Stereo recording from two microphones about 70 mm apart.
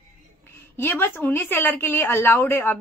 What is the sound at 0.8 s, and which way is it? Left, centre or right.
A woman's voice, left.